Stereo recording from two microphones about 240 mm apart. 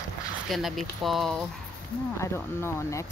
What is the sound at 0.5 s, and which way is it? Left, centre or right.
Speech, centre.